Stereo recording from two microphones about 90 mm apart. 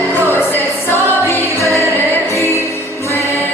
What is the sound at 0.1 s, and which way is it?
Music, 25° left (ahead or behind).